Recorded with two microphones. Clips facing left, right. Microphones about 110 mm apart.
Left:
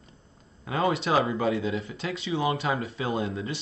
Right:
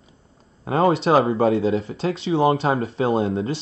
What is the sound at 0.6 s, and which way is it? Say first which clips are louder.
Speech: right 8 dB; 35° right (ahead or behind).